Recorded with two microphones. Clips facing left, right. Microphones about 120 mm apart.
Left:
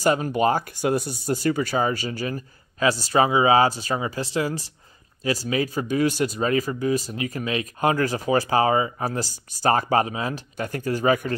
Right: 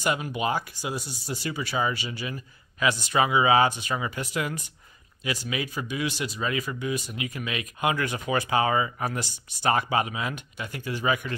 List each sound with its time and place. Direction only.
0.0 s speech: 40° left (ahead or behind)